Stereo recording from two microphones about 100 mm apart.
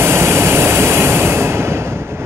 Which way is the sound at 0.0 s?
25° right (ahead or behind).